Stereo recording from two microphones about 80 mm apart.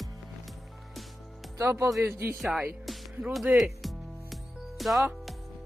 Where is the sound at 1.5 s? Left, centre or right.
Right.